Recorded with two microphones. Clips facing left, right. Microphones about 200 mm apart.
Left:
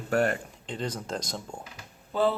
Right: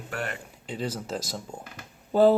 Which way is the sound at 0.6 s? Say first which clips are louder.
Right 4 dB; 5° right (ahead or behind).